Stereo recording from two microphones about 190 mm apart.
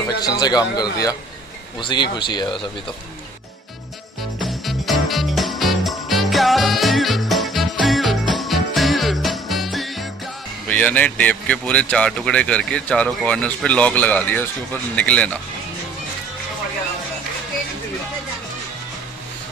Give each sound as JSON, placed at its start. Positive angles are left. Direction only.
{"t": 0.2, "sound": "speech", "side_deg": 20}
{"t": 4.4, "sound": "music", "side_deg": 0}
{"t": 15.0, "sound": "speech", "side_deg": 5}